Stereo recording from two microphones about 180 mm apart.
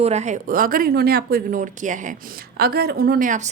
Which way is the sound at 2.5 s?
60° right (ahead or behind).